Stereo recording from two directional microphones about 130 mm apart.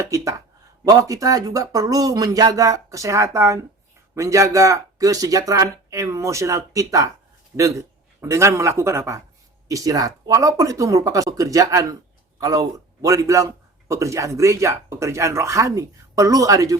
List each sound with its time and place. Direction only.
0.1 s a man's voice: 25° right (ahead or behind)